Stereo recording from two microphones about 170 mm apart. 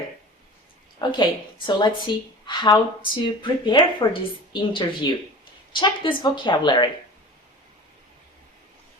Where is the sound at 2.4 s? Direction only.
25° left (ahead or behind).